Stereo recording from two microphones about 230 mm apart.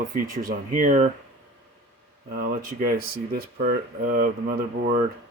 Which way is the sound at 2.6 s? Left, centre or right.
Right.